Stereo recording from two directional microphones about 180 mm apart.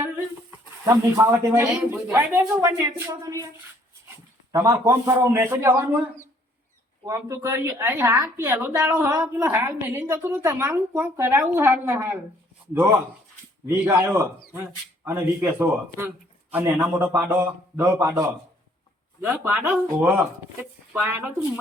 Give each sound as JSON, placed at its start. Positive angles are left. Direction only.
{"t": 0.9, "sound": "a woman's voice", "side_deg": -15}
{"t": 4.5, "sound": "a woman's voice", "side_deg": -20}
{"t": 7.0, "sound": "a woman's voice", "side_deg": -15}
{"t": 13.7, "sound": "a woman's voice", "side_deg": -15}